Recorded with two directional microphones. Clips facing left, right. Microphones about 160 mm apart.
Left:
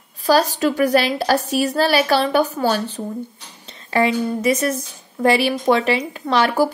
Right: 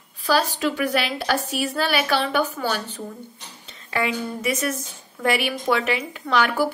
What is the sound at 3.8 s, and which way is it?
A woman's voice, 35° left (ahead or behind).